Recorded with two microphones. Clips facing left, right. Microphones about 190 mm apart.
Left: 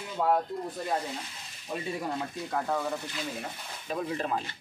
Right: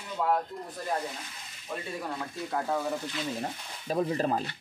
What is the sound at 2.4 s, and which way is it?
Speech, 5° right (ahead or behind).